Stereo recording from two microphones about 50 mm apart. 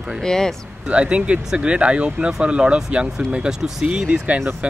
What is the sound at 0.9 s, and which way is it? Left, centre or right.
Speech, right.